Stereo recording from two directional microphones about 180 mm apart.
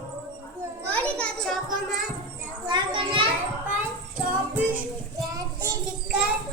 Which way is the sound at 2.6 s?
25° right (ahead or behind).